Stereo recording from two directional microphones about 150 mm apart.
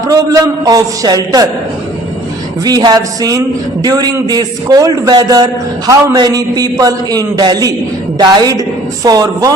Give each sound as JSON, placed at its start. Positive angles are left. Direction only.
{"t": 0.1, "sound": "a man's voice", "side_deg": -25}
{"t": 2.6, "sound": "a man's voice", "side_deg": -25}